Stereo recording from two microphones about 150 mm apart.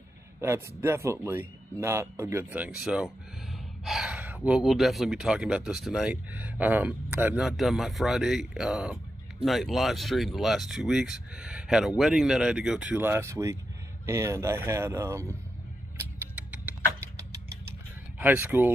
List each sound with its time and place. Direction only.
0.4 s speech: 15° right (ahead or behind)
16.0 s a sound: 10° right (ahead or behind)
18.2 s speech: 10° right (ahead or behind)